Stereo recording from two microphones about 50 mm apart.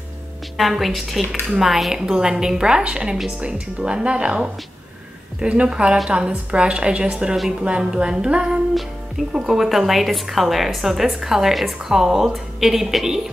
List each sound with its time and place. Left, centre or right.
0.6 s a woman's voice: centre
9.3 s a woman's voice: centre